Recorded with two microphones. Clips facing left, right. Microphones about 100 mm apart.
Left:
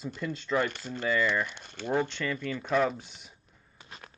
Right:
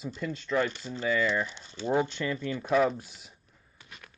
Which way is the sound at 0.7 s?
55° left (ahead or behind).